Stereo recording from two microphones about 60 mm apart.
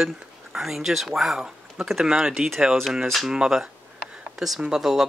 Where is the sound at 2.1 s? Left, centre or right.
Centre.